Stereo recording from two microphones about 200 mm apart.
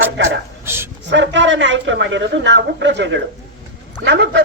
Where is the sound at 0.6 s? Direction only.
10° right (ahead or behind).